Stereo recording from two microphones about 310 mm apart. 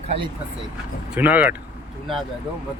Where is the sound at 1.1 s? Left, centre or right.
Centre.